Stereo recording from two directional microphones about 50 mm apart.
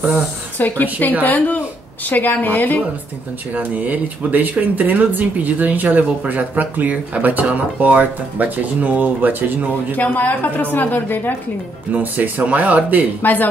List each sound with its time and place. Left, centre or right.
0.1 s a woman's voice: left
3.5 s speech: right
9.9 s a woman's voice: left
11.9 s speech: right
13.2 s a woman's voice: left